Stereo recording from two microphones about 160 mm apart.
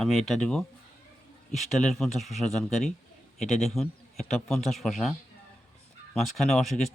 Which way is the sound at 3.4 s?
45° left (ahead or behind).